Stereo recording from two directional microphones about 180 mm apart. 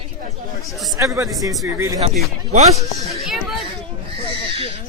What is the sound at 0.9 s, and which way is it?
A man's voice, 15° right (ahead or behind).